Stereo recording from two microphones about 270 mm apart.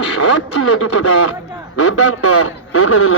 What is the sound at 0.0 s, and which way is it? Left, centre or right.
Speech, left.